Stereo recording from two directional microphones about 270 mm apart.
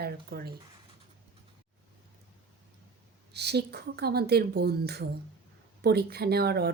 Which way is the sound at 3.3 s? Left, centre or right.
Right.